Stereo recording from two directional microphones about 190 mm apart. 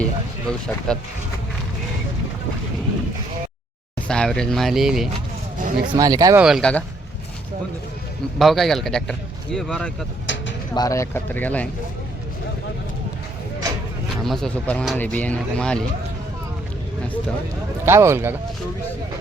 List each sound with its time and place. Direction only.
0.0 s speech: 5° left (ahead or behind)
4.1 s speech: 5° left (ahead or behind)
5.9 s speech: 20° right (ahead or behind)
6.4 s speech: centre (ahead or behind)
8.4 s speech: centre (ahead or behind)
10.8 s speech: 15° left (ahead or behind)
14.3 s speech: 5° left (ahead or behind)
17.0 s speech: 5° left (ahead or behind)
17.8 s speech: 15° right (ahead or behind)